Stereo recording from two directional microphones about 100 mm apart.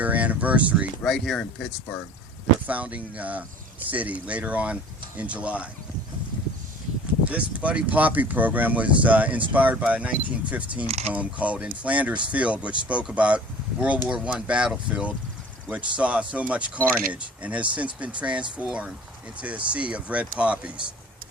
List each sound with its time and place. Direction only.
0.0 s speech: 15° right (ahead or behind)
1.0 s speech: centre (ahead or behind)
2.6 s speech: 15° right (ahead or behind)
7.3 s speech: 15° right (ahead or behind)